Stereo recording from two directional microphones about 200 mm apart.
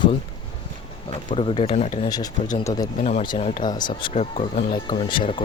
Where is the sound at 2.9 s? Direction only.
30° left (ahead or behind).